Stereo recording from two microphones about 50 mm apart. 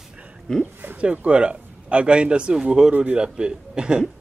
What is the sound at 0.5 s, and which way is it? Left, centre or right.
Speech, centre.